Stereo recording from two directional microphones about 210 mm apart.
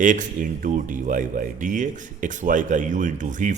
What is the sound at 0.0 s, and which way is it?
Speech, 40° right (ahead or behind).